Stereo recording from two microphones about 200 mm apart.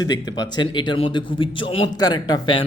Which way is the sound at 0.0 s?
20° left (ahead or behind).